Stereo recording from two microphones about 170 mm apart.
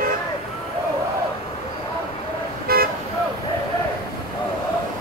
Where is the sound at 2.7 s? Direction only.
65° right (ahead or behind).